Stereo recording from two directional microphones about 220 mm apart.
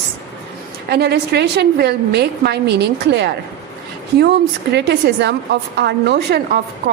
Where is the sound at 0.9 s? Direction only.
50° right (ahead or behind).